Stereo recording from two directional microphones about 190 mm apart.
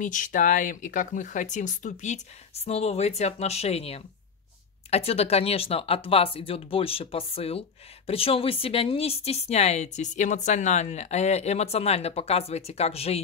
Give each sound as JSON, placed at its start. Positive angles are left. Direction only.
{"t": 0.0, "sound": "a woman's voice", "side_deg": 45}